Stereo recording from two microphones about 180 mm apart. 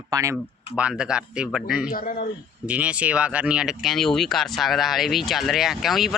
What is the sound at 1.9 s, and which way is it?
Speech, 50° left (ahead or behind).